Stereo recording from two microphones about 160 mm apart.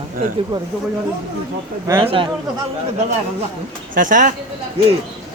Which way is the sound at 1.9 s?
20° right (ahead or behind).